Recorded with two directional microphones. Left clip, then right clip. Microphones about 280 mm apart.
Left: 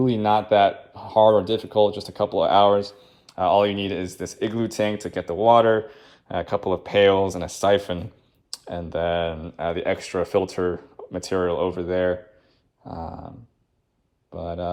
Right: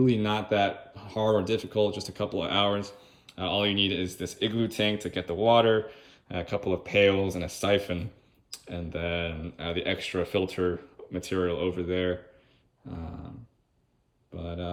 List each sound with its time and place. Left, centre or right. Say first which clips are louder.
0.3 s speech: left 9 dB; centre
2.4 s speech: left 10 dB; left
2.8 s speech: left 6 dB; centre
6.4 s speech: left 6 dB; left
6.8 s speech: left 6 dB; centre
14.4 s speech: left 8 dB; centre